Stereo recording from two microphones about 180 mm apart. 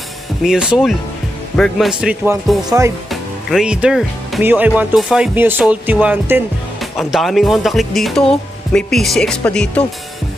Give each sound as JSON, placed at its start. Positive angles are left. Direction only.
{"t": 0.4, "sound": "speech", "side_deg": -5}